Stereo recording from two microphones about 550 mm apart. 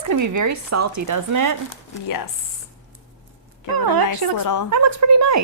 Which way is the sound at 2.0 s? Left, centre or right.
Left.